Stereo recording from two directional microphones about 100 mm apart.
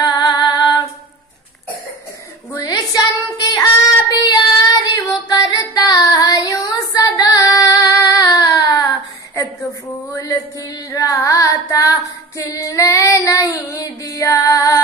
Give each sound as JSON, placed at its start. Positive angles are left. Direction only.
{"t": 0.0, "sound": "female singing", "side_deg": 40}
{"t": 2.5, "sound": "a sound", "side_deg": 35}
{"t": 4.1, "sound": "child singing", "side_deg": 45}
{"t": 10.1, "sound": "carnatic music", "side_deg": 35}